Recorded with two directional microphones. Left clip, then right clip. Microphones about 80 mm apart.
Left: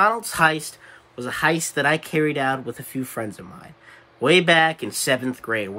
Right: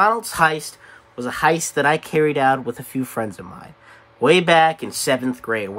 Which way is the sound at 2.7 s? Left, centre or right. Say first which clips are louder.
Right 4 dB; right.